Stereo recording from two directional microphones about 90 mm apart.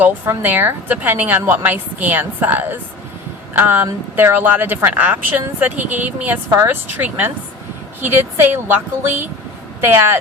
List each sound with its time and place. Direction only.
0.3 s a woman's voice: 25° right (ahead or behind)